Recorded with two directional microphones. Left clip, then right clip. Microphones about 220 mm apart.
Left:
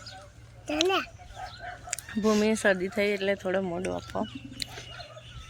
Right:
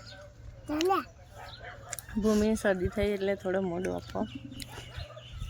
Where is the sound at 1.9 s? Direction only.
5° left (ahead or behind).